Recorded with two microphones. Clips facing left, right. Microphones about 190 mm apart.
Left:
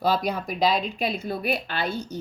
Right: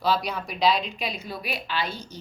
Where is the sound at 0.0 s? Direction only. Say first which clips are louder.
Left 2 dB; 50° left (ahead or behind).